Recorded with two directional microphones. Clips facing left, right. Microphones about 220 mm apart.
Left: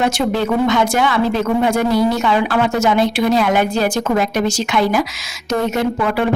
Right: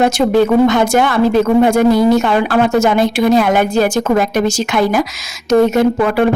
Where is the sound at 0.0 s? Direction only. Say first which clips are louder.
Right 6 dB; 50° right (ahead or behind).